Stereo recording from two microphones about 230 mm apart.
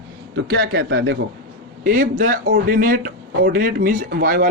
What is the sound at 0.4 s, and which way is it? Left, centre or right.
Speech, right.